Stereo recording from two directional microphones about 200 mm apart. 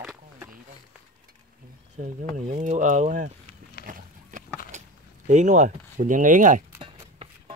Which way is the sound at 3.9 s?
40° right (ahead or behind).